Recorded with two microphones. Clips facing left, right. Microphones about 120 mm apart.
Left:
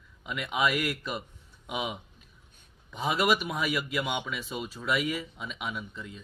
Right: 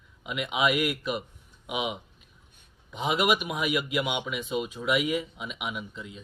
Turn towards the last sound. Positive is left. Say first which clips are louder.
# right 1 dB
turn(degrees=-15)  # may be behind; listen again after turning